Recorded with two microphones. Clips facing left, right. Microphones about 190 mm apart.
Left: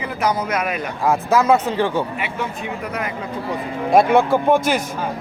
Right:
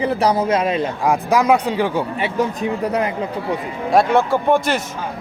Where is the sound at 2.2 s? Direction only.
35° right (ahead or behind).